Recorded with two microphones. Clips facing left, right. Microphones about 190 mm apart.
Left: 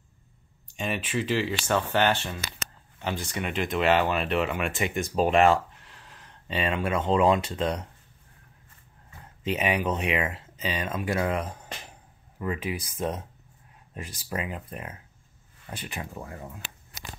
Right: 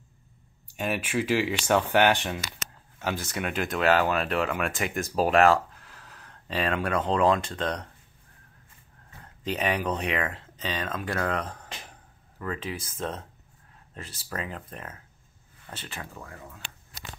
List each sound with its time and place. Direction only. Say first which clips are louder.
0.7 s speech: right 1 dB; 10° right (ahead or behind)
3.0 s speech: right 1 dB; 5° right (ahead or behind)
9.4 s speech: left 1 dB; 5° left (ahead or behind); by 16.6 s 25° left (ahead or behind)